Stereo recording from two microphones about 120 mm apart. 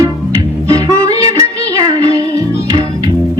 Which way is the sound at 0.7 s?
30° right (ahead or behind).